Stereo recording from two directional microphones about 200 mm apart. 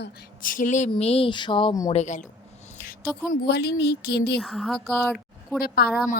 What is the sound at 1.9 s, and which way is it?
Speech, 35° left (ahead or behind).